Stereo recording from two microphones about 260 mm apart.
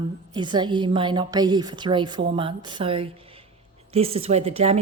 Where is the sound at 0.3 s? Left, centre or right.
Centre.